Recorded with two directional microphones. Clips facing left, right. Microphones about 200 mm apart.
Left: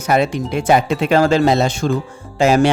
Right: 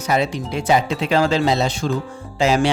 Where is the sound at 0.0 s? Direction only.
55° left (ahead or behind).